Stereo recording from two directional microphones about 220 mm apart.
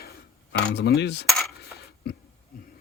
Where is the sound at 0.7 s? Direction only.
50° left (ahead or behind).